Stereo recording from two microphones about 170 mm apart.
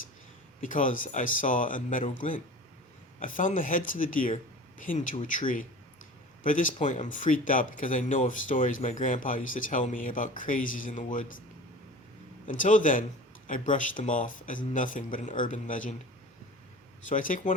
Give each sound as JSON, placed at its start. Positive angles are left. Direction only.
{"t": 0.6, "sound": "speech", "side_deg": 50}
{"t": 3.2, "sound": "speech", "side_deg": 50}
{"t": 12.5, "sound": "speech", "side_deg": 50}
{"t": 17.1, "sound": "speech", "side_deg": 50}